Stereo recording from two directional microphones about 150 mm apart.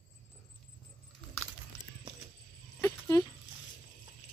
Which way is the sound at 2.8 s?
15° left (ahead or behind).